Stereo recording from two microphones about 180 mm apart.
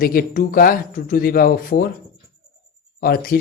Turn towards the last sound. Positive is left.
turn(degrees=55)  # may be behind; listen again after turning